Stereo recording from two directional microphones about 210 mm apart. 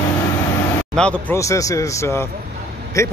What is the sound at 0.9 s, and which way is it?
Speech, 10° left (ahead or behind).